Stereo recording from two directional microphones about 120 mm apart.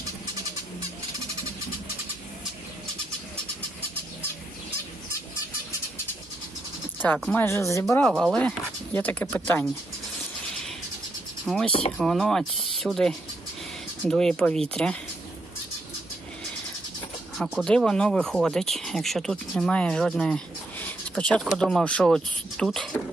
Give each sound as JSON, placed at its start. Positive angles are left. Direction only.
{"t": 7.3, "sound": "speech", "side_deg": 20}
{"t": 8.3, "sound": "speech", "side_deg": 10}
{"t": 11.4, "sound": "speech", "side_deg": 5}
{"t": 17.3, "sound": "speech", "side_deg": -5}